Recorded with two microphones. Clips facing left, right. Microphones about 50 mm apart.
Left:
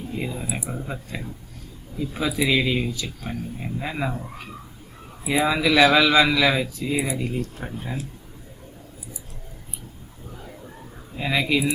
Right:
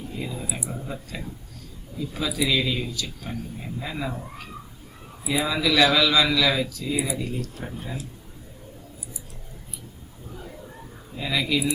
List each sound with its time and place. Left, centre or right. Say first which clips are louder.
0.2 s speech: left 2 dB; left
5.2 s speech: left 3 dB; left
11.2 s speech: left 3 dB; left